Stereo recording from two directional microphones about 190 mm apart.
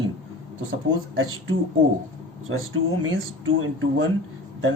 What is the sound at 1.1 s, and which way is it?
Speech, 90° right.